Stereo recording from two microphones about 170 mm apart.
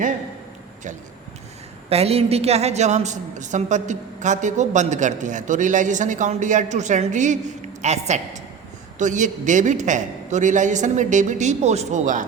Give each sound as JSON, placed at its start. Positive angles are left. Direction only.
{"t": 1.9, "sound": "a woman's voice", "side_deg": -35}